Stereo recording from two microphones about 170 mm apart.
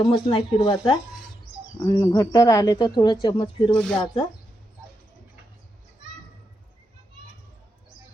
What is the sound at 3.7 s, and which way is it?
Speech, 5° left (ahead or behind).